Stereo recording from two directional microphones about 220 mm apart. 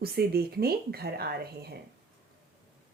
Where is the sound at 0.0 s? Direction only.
45° right (ahead or behind).